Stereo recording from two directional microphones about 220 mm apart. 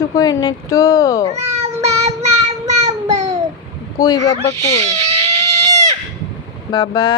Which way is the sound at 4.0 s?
15° left (ahead or behind).